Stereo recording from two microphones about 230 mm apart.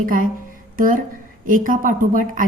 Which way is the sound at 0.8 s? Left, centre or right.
Right.